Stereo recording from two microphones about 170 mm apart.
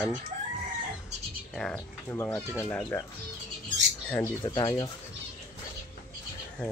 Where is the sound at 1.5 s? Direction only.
5° left (ahead or behind).